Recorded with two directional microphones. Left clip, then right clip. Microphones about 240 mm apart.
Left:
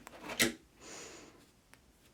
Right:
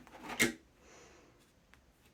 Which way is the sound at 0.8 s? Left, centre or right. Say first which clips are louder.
Left 9 dB; left.